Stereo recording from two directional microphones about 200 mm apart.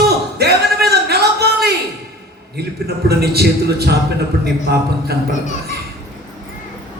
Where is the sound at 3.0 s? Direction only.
50° right (ahead or behind).